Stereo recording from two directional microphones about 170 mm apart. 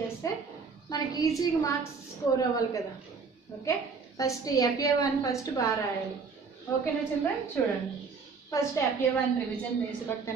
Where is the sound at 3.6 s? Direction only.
20° left (ahead or behind).